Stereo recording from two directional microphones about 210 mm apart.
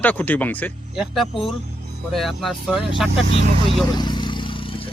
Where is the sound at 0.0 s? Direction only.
10° left (ahead or behind).